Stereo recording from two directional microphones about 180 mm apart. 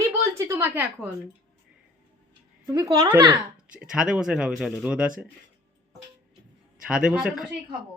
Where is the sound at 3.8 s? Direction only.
5° right (ahead or behind).